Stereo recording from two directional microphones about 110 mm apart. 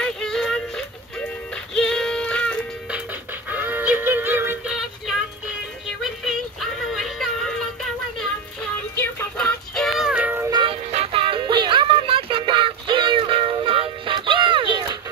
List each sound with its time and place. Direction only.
0.0 s music: 5° left (ahead or behind)
3.4 s music: 15° right (ahead or behind)
4.6 s music: 5° right (ahead or behind)
6.2 s music: centre (ahead or behind)
9.4 s music: 5° left (ahead or behind); by 10.4 s 10° right (ahead or behind)
10.5 s music: 50° right (ahead or behind)
10.9 s music: 65° right (ahead or behind); by 15.0 s 45° right (ahead or behind)